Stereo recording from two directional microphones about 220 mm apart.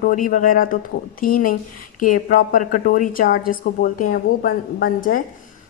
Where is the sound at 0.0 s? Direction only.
35° left (ahead or behind).